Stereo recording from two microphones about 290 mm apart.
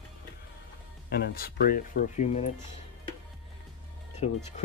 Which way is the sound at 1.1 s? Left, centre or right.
Left.